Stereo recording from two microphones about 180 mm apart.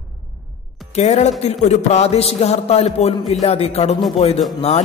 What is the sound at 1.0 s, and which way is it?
A man's voice, 40° left (ahead or behind).